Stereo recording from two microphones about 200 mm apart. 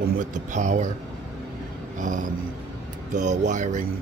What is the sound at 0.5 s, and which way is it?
Speech, 35° right (ahead or behind).